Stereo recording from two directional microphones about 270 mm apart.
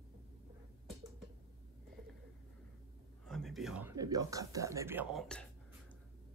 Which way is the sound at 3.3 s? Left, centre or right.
Centre.